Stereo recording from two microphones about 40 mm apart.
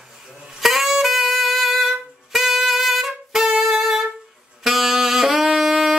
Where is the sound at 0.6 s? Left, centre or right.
Centre.